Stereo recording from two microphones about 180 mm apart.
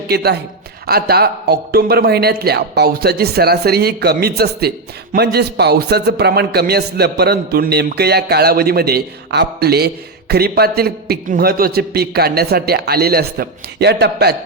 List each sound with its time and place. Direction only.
0.1 s a man's voice: 60° right (ahead or behind)